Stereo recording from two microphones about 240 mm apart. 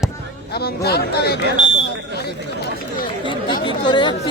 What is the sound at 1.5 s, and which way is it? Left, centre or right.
Speech, right.